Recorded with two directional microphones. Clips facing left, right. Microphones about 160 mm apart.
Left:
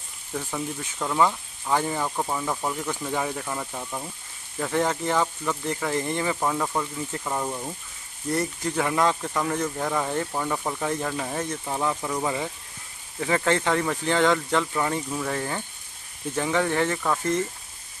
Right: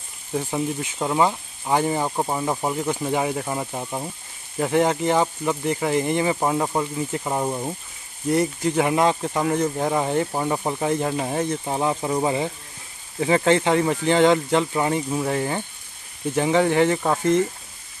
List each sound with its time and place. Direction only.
0.3 s speech: 25° right (ahead or behind)
7.0 s speech: 10° right (ahead or behind)
7.2 s speech: 25° right (ahead or behind)